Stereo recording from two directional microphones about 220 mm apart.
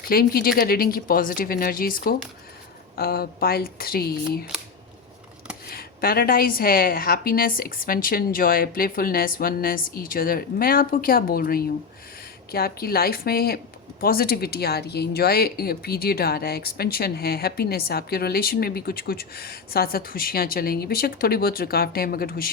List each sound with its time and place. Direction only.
0.1 s a woman's voice: 40° left (ahead or behind)
5.6 s a woman's voice: 45° left (ahead or behind)